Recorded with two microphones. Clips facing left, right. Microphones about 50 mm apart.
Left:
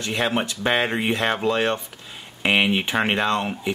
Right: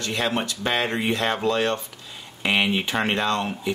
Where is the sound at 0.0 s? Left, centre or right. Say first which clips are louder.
Left 2 dB; centre.